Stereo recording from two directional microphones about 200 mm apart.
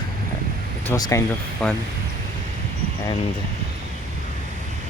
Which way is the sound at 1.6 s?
5° left (ahead or behind).